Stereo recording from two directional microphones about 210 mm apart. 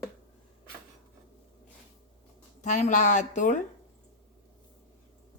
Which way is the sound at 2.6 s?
35° left (ahead or behind).